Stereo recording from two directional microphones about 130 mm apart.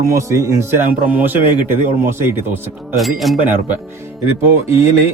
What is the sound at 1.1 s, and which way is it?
Speech, 15° right (ahead or behind).